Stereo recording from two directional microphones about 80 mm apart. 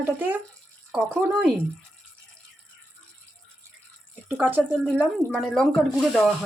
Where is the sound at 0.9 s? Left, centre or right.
Centre.